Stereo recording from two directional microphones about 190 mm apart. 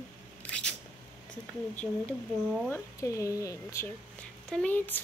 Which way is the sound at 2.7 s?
15° left (ahead or behind).